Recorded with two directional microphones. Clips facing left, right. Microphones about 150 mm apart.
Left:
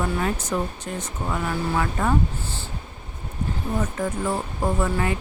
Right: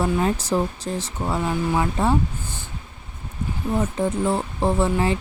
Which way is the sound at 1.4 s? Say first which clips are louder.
Right 2 dB; 15° right (ahead or behind).